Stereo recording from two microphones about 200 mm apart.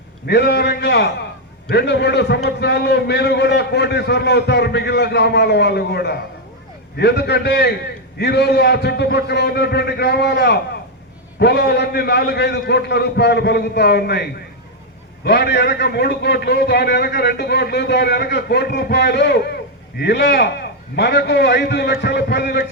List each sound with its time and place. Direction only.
0.3 s a man's voice: 55° left (ahead or behind)